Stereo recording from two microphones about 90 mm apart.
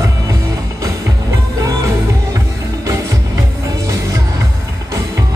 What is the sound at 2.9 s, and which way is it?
Music, 35° right (ahead or behind).